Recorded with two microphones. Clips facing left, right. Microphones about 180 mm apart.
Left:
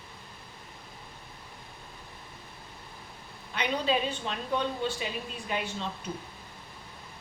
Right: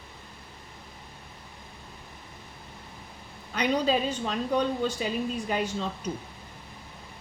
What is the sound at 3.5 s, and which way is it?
A woman's voice, 40° right (ahead or behind).